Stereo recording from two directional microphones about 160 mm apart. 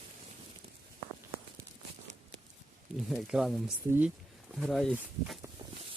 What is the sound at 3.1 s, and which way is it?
Speech, centre (ahead or behind).